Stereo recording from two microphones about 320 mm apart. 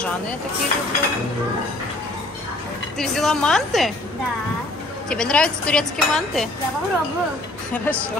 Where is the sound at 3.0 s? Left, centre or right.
Centre.